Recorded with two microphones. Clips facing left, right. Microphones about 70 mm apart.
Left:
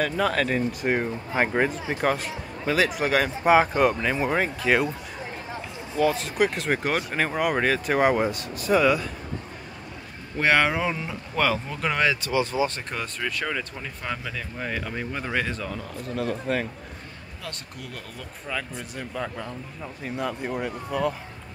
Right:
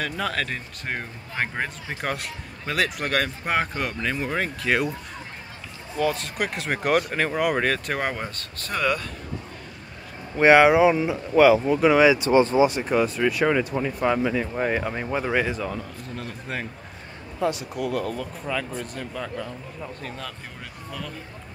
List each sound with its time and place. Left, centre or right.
0.0 s speech: centre
5.9 s speech: centre
10.4 s speech: centre
12.2 s speech: right
12.6 s speech: centre